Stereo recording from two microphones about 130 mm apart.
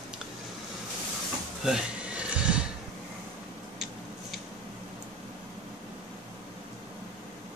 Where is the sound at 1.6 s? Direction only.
5° right (ahead or behind).